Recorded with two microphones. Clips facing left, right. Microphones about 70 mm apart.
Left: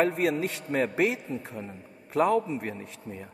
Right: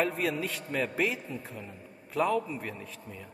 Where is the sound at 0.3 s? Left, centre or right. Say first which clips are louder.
Left 4 dB; left.